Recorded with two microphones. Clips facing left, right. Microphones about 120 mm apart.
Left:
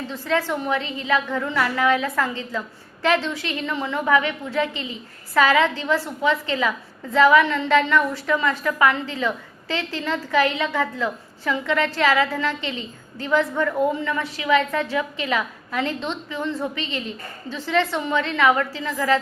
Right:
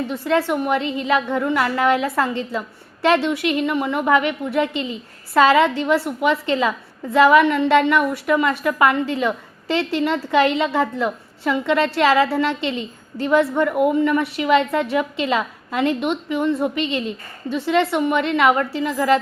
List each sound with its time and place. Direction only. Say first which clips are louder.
0.1 s a woman's voice: right 2 dB; 15° right (ahead or behind)
12.7 s a woman's voice: right 5 dB; 20° left (ahead or behind)
13.5 s a woman's voice: right 4 dB; 20° right (ahead or behind)